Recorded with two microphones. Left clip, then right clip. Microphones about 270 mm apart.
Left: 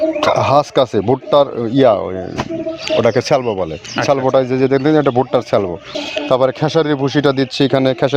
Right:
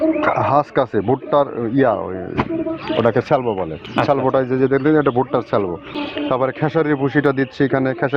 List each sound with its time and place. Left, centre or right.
0.2 s speech: left